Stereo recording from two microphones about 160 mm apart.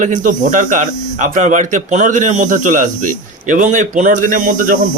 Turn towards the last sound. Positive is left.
turn(degrees=-60)  # may be behind; listen again after turning